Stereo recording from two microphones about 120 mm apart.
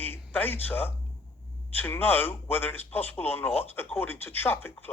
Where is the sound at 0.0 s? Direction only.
15° left (ahead or behind).